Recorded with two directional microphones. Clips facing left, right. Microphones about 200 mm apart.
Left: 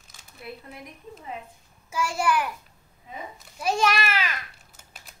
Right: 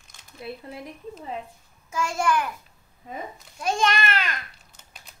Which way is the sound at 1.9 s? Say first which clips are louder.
Right 1 dB; 5° left (ahead or behind).